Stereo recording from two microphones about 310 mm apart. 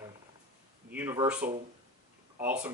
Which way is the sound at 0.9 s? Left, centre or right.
Centre.